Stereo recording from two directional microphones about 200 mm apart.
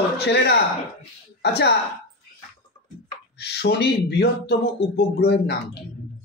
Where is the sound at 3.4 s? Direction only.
55° left (ahead or behind).